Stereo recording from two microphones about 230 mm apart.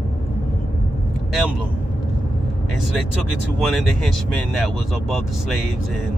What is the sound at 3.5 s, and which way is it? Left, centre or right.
Speech, centre.